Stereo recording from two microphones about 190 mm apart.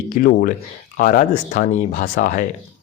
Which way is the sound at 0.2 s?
50° left (ahead or behind).